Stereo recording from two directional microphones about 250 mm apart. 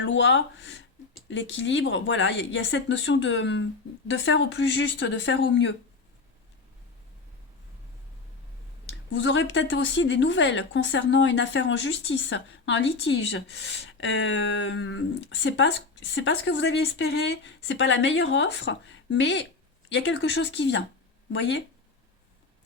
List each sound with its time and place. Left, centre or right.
0.0 s speech: left
8.9 s speech: left